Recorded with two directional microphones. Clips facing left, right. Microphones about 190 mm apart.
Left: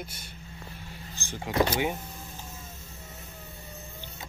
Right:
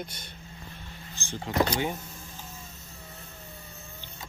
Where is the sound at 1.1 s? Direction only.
15° left (ahead or behind).